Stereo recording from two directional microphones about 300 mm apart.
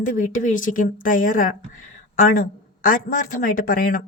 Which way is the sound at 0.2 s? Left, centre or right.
Left.